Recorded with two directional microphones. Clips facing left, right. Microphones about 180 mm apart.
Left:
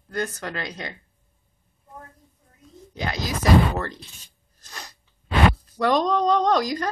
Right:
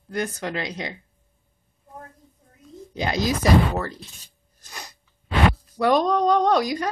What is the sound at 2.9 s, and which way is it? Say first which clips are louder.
Speech: right 4 dB; 20° right (ahead or behind).